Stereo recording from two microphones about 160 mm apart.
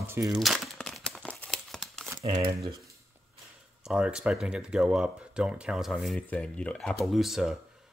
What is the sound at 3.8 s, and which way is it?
Speech, 5° right (ahead or behind).